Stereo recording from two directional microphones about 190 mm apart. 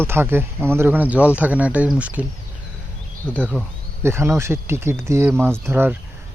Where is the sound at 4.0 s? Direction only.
15° right (ahead or behind).